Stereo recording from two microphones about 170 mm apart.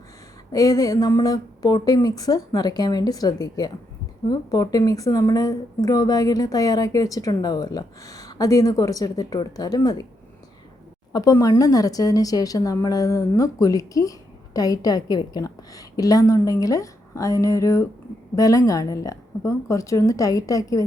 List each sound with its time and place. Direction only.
0.5 s speech: 20° left (ahead or behind)
11.1 s speech: 20° left (ahead or behind)